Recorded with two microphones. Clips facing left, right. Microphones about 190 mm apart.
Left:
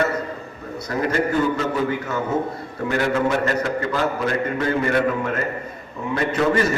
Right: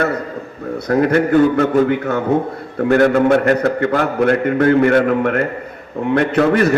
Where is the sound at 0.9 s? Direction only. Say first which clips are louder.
Right 8 dB; 60° right (ahead or behind).